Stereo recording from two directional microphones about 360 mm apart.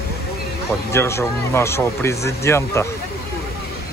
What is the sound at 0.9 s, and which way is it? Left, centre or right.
Speech, centre.